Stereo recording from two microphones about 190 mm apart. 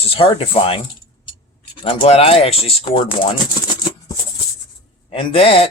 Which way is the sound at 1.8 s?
25° left (ahead or behind).